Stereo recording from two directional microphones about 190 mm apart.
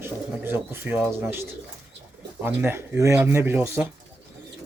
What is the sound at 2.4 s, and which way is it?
Speech, 10° right (ahead or behind).